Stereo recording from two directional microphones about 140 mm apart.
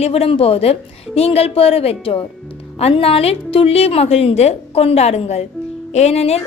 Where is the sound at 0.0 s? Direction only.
45° left (ahead or behind).